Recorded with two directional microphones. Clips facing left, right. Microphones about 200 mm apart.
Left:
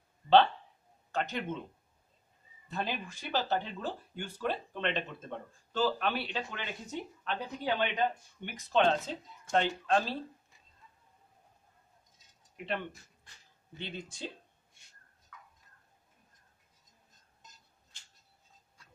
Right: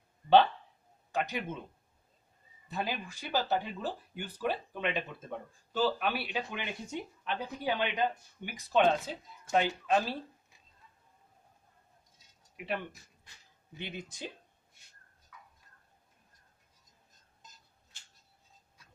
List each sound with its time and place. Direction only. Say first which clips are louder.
1.1 s speech: even; 10° right (ahead or behind)
2.7 s speech: even; 10° right (ahead or behind)
12.5 s speech: even; 10° right (ahead or behind)